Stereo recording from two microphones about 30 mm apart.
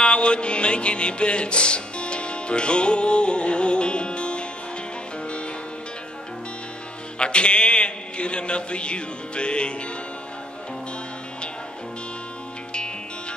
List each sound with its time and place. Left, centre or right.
0.0 s music: left
7.2 s a man's voice: left